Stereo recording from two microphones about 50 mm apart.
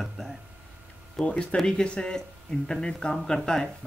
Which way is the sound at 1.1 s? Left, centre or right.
Left.